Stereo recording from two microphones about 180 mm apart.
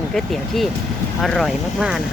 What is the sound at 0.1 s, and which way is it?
Speech, centre (ahead or behind).